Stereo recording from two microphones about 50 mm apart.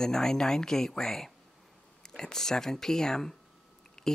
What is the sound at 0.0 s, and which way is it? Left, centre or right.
Speech, centre.